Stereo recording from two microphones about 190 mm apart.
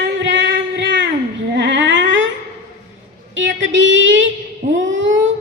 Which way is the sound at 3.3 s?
75° right (ahead or behind).